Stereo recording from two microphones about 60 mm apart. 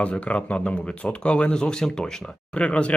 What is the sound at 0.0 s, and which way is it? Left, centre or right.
Speech, left.